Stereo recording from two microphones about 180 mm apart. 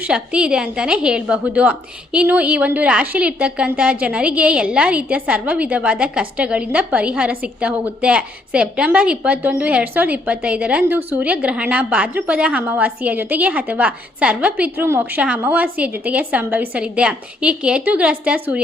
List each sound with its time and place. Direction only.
0.0 s a woman's voice: 5° right (ahead or behind)